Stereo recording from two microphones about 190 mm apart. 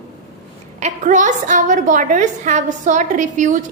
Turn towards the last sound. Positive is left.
turn(degrees=-40)  # may be behind; listen again after turning